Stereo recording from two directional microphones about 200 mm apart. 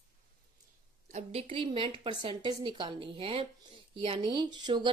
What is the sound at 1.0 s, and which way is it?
A woman's voice, 35° right (ahead or behind).